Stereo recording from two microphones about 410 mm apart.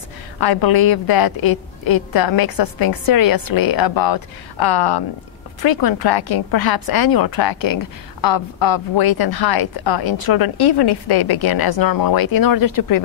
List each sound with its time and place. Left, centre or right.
0.4 s speech: left